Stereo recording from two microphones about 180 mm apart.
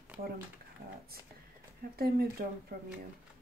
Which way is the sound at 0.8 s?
65° right (ahead or behind).